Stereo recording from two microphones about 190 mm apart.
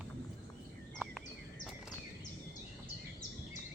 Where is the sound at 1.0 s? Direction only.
10° right (ahead or behind).